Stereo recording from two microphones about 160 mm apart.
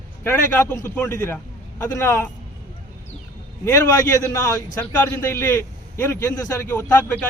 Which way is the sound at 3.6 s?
15° left (ahead or behind).